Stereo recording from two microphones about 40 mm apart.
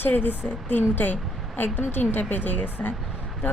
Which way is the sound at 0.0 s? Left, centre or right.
Left.